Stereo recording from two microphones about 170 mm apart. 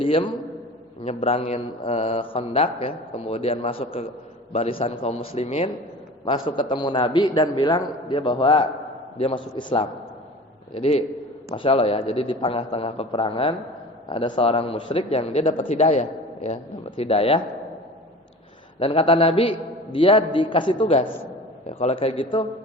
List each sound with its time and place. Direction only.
0.0 s a man's voice: 30° left (ahead or behind)
11.5 s speech: 30° left (ahead or behind)
18.8 s speech: 35° left (ahead or behind)